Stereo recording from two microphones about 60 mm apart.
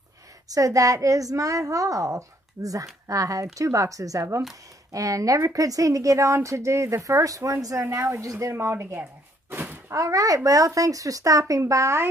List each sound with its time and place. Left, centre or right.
0.5 s a child's voice: right
7.8 s speech: right
8.5 s speech: right
9.5 s a sound: right
9.9 s a child's voice: right